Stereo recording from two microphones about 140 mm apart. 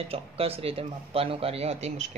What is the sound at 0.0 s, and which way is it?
Speech, 45° right (ahead or behind).